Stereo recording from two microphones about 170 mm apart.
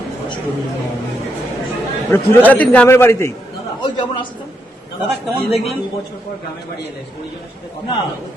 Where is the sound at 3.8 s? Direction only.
30° left (ahead or behind).